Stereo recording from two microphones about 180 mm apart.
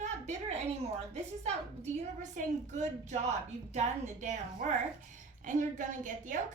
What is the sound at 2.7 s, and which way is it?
A woman's voice, 40° right (ahead or behind).